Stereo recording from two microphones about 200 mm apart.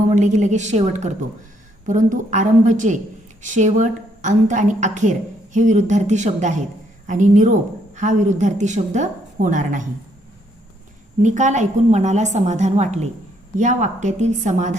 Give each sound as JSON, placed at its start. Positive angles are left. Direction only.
{"t": 0.1, "sound": "a woman's voice", "side_deg": -35}
{"t": 11.2, "sound": "a woman's voice", "side_deg": -35}